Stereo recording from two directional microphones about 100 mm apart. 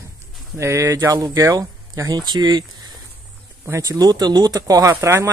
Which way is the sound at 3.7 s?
30° right (ahead or behind).